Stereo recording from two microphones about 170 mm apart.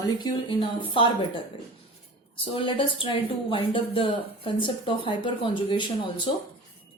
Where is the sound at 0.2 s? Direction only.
30° left (ahead or behind).